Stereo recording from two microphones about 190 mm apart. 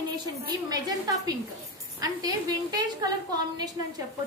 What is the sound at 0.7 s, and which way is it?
Speech, 20° right (ahead or behind).